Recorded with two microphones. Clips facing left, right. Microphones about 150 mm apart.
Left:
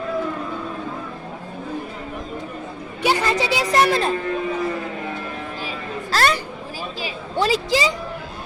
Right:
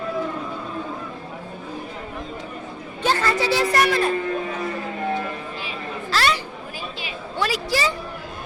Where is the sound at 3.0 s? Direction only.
15° left (ahead or behind).